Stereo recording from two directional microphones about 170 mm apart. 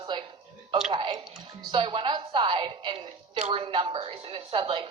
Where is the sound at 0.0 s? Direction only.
25° right (ahead or behind).